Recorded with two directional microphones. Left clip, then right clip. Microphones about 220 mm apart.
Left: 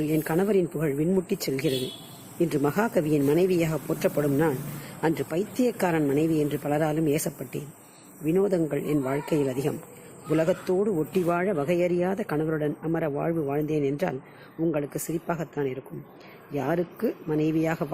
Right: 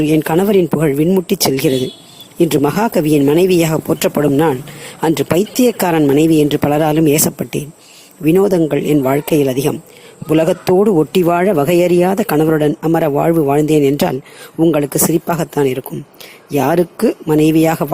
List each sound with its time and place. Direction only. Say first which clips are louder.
0.0 s speech: right 12 dB; 40° right (ahead or behind)